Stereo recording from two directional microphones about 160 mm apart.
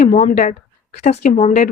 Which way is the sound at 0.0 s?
55° left (ahead or behind).